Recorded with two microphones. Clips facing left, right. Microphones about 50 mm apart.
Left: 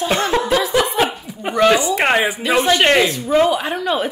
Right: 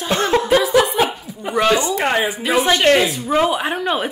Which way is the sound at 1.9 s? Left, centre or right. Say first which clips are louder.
Left 2 dB; left.